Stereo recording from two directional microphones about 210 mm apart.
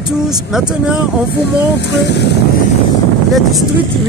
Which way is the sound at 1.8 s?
55° left (ahead or behind).